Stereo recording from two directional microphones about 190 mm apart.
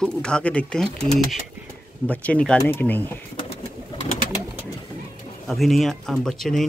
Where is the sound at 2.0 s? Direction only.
5° left (ahead or behind).